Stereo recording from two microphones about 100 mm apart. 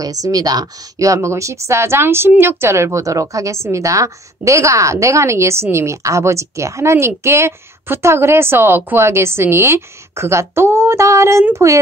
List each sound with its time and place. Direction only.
0.0 s a woman's voice: 40° right (ahead or behind)